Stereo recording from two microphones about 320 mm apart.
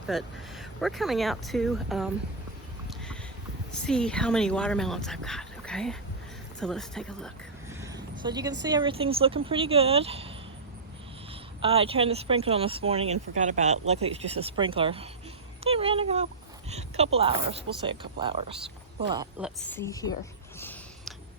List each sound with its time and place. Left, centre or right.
0.1 s speech: centre
3.8 s speech: centre
7.7 s a sound: centre
8.2 s speech: centre
11.6 s speech: centre
15.7 s a sound: centre
16.6 s speech: centre
19.6 s speech: centre
20.6 s a sound: centre